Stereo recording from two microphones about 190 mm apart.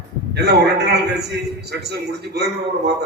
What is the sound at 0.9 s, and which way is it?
A man's voice, 60° right (ahead or behind).